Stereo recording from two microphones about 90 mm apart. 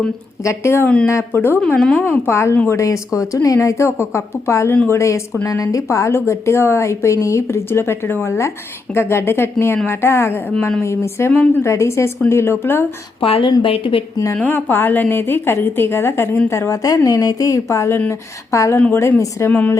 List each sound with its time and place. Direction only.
0.4 s a woman's voice: 30° left (ahead or behind)
1.6 s a woman's voice: 10° left (ahead or behind)
2.0 s a woman's voice: 25° left (ahead or behind)
13.1 s speech: 80° left
14.3 s a woman's voice: 20° left (ahead or behind)
19.5 s a woman's voice: 15° left (ahead or behind)